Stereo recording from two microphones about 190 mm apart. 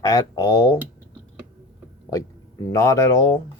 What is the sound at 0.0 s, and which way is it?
Speech, 20° left (ahead or behind).